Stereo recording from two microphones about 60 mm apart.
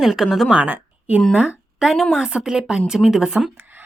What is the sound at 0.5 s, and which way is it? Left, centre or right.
A woman's voice, right.